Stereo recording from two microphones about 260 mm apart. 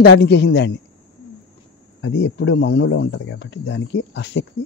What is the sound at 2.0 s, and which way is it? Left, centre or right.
Speech, left.